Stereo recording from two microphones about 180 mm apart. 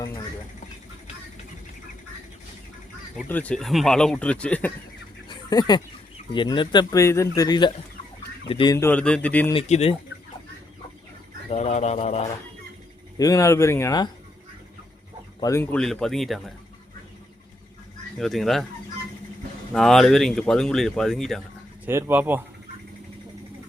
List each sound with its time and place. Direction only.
3.2 s speech: 10° left (ahead or behind)
5.3 s duck: 20° left (ahead or behind)
6.3 s speech: 25° left (ahead or behind)
8.7 s speech: 10° left (ahead or behind)
9.5 s speech: 35° left (ahead or behind)
11.4 s speech: 35° left (ahead or behind)
13.1 s speech: 20° left (ahead or behind)
15.4 s speech: 15° left (ahead or behind)
18.2 s speech: centre (ahead or behind)
19.7 s speech: centre (ahead or behind)
21.8 s speech: 15° right (ahead or behind)